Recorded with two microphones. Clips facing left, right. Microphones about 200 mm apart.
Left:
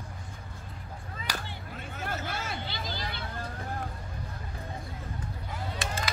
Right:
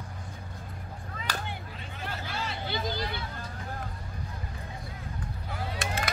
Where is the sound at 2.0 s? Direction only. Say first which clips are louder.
Even; 50° left (ahead or behind).